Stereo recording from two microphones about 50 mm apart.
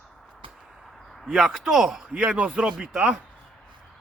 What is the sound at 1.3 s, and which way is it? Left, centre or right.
Speech, centre.